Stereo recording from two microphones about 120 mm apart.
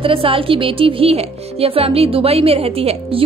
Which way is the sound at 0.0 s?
50° right (ahead or behind).